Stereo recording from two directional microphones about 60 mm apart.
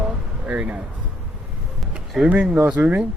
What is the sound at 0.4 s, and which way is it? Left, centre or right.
Speech, right.